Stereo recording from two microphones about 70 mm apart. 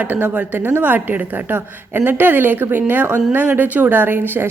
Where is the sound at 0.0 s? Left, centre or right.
Right.